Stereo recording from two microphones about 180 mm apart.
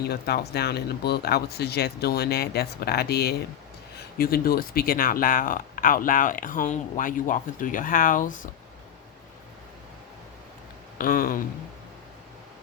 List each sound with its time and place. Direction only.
0.1 s speech: 65° left (ahead or behind); by 8.4 s 50° left (ahead or behind)
10.9 s speech: 50° left (ahead or behind)